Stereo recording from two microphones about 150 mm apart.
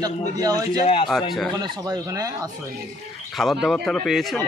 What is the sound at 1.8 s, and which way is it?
Speech, 25° right (ahead or behind).